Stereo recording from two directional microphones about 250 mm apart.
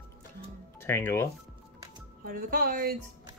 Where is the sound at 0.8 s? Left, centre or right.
Centre.